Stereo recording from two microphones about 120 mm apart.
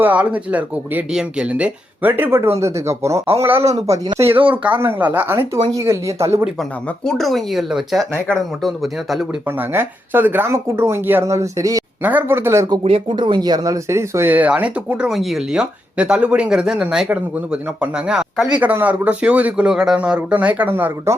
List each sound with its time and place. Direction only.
0.0 s a man's voice: 10° right (ahead or behind)
6.6 s speech: 5° left (ahead or behind)
9.6 s speech: 15° right (ahead or behind)
12.8 s a man's voice: 50° right (ahead or behind); by 21.2 s 20° right (ahead or behind)